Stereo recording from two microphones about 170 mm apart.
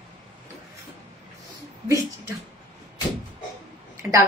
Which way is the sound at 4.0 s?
15° right (ahead or behind).